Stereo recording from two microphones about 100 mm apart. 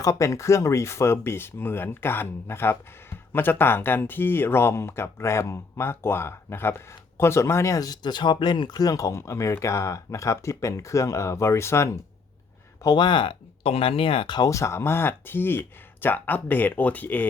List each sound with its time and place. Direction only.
0.0 s speech: 30° left (ahead or behind)
12.8 s speech: 45° left (ahead or behind)
14.5 s speech: 30° left (ahead or behind)